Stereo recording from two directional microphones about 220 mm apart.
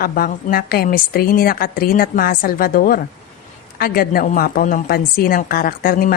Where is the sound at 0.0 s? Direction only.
40° left (ahead or behind).